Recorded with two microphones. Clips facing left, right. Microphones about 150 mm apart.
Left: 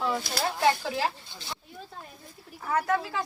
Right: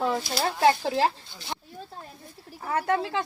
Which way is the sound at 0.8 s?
30° right (ahead or behind).